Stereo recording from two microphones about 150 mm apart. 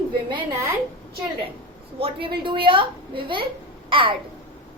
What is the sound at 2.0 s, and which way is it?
A woman's voice, 35° right (ahead or behind).